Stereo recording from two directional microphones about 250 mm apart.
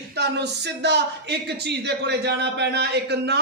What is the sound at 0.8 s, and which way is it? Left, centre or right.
A man's voice, right.